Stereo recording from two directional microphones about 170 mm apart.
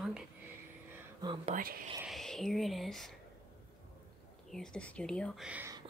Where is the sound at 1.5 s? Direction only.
55° right (ahead or behind).